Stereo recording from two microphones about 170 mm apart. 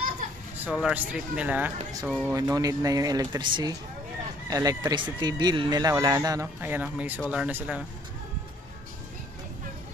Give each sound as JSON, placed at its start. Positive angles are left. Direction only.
{"t": 0.7, "sound": "speech", "side_deg": -5}
{"t": 2.2, "sound": "speech", "side_deg": -20}